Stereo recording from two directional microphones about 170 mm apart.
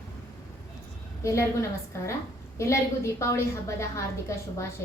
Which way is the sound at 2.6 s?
15° left (ahead or behind).